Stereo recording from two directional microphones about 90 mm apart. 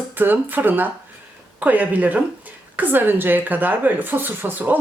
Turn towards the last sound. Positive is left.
turn(degrees=-20)  # may be behind; listen again after turning